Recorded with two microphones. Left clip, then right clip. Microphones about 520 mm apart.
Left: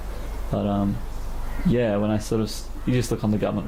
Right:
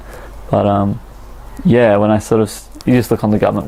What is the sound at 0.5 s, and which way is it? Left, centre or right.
Speech, right.